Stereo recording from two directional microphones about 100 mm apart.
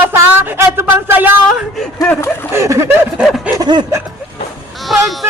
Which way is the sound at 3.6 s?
45° right (ahead or behind).